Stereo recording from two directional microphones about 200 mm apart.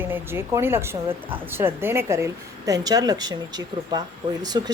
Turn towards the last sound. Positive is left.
turn(degrees=-20)  # may be behind; listen again after turning